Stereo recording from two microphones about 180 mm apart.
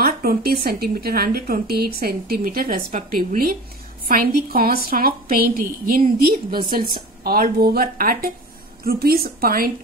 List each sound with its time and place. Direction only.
0.0 s a woman's voice: 55° right (ahead or behind)